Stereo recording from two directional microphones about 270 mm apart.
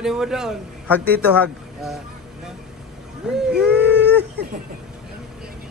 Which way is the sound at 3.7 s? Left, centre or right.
Right.